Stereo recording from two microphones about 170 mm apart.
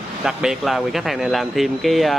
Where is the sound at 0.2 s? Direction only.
5° right (ahead or behind).